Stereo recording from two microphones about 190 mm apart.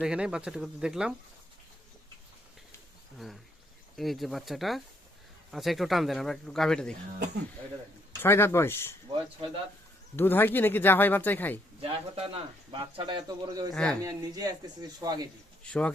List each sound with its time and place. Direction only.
0.0 s speech: 5° right (ahead or behind)
3.9 s speech: centre (ahead or behind)
8.2 s speech: 10° left (ahead or behind)
10.2 s speech: 10° left (ahead or behind)
11.8 s speech: 30° right (ahead or behind)
13.7 s speech: 5° left (ahead or behind)
14.0 s speech: 20° right (ahead or behind)
15.6 s speech: 5° left (ahead or behind)